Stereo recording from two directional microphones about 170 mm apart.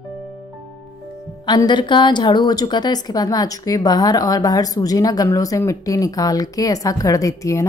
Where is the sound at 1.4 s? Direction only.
25° left (ahead or behind).